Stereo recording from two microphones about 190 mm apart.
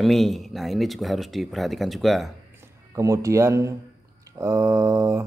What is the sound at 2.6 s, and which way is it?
Speech, 15° right (ahead or behind).